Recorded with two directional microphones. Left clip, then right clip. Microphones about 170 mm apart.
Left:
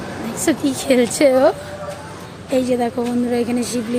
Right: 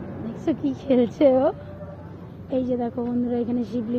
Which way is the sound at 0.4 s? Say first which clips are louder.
Left 7 dB; 15° left (ahead or behind).